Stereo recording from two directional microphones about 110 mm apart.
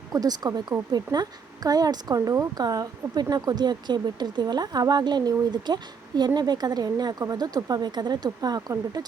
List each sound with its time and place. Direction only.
0.1 s a woman's voice: 35° right (ahead or behind)